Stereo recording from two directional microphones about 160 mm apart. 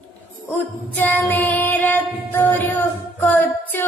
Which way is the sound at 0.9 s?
10° left (ahead or behind).